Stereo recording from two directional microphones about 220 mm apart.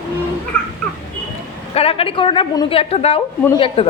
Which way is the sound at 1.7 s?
25° left (ahead or behind).